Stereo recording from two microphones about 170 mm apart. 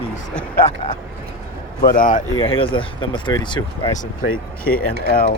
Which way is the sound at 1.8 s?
55° left (ahead or behind).